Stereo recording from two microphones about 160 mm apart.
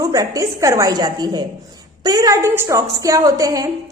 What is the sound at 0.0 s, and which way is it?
A woman's voice, 20° right (ahead or behind).